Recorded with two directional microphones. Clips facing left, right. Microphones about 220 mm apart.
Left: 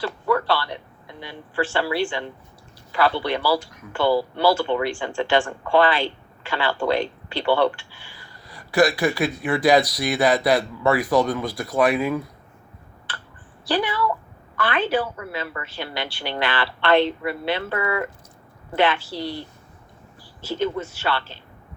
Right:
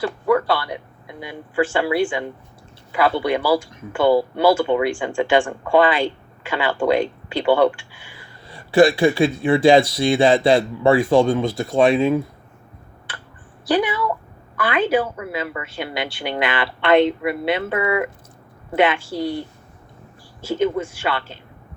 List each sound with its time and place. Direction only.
0.0 s a woman's voice: 15° right (ahead or behind)
8.4 s speech: 25° right (ahead or behind)
13.7 s a woman's voice: 10° right (ahead or behind)
20.5 s a woman's voice: 10° right (ahead or behind)